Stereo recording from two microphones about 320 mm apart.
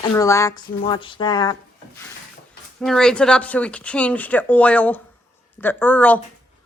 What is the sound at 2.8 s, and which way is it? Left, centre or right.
Speech, centre.